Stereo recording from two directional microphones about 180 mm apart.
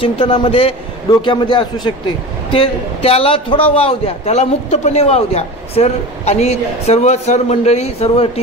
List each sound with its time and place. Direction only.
0.0 s a man's voice: 30° left (ahead or behind)